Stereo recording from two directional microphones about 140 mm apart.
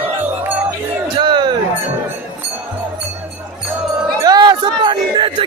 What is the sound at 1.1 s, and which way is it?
Music, 35° right (ahead or behind).